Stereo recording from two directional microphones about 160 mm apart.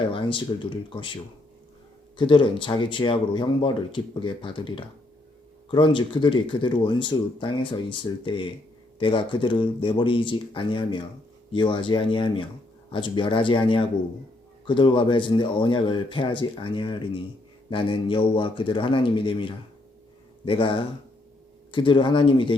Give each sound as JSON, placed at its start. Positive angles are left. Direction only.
{"t": 0.0, "sound": "speech", "side_deg": 30}